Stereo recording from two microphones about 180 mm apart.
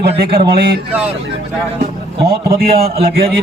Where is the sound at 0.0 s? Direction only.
60° right (ahead or behind).